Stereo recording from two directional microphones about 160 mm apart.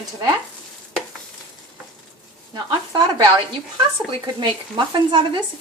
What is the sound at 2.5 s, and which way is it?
Speech, 25° right (ahead or behind).